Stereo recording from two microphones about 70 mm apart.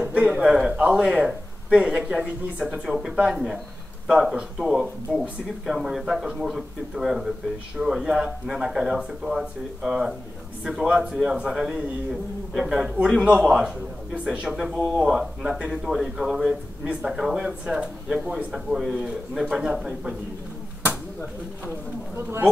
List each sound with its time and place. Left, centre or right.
0.0 s a sound: centre
0.4 s speech: centre
22.1 s speech: right